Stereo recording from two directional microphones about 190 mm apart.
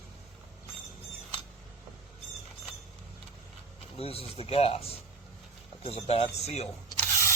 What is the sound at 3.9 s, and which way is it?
Speech, 30° left (ahead or behind).